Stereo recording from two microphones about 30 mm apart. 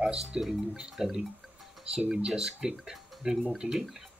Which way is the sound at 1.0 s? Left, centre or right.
Centre.